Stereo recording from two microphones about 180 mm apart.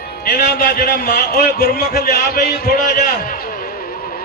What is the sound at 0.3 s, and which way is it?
A man's voice, 60° left (ahead or behind).